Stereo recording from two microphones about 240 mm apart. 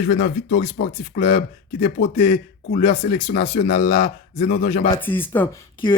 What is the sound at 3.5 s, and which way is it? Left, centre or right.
A man's voice, left.